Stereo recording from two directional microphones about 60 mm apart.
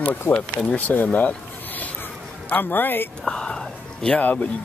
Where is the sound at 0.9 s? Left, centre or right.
Centre.